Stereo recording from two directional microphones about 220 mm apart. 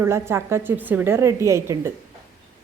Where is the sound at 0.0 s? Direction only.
10° right (ahead or behind).